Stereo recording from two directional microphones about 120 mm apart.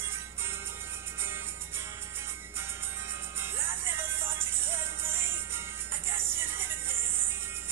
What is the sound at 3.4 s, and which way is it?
Music, 20° right (ahead or behind).